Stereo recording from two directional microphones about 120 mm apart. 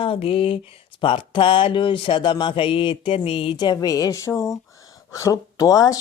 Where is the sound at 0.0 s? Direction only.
50° left (ahead or behind).